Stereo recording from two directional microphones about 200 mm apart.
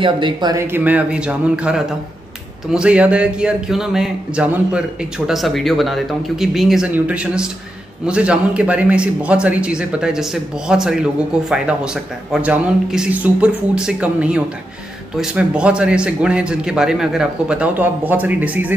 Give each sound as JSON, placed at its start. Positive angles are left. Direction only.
{"t": 0.0, "sound": "a man's voice", "side_deg": -20}